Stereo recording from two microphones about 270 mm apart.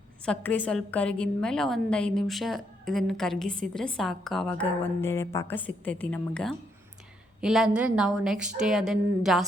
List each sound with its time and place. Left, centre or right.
0.3 s a woman's voice: centre